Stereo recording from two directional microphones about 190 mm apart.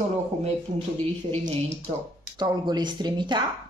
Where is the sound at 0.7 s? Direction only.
40° right (ahead or behind).